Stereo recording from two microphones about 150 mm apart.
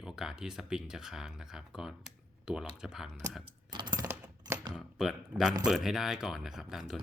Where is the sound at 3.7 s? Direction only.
30° right (ahead or behind).